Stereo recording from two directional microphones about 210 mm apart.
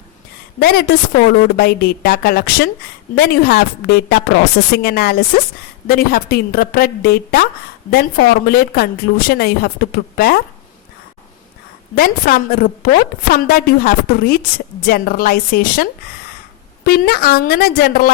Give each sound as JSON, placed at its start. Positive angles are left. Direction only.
{"t": 0.6, "sound": "a woman's voice", "side_deg": 45}
{"t": 11.9, "sound": "a woman's voice", "side_deg": 45}